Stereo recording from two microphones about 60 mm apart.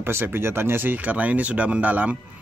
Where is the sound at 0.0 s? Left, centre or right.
Right.